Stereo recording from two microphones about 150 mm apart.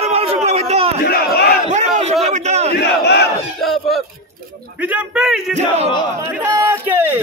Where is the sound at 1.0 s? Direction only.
90° left.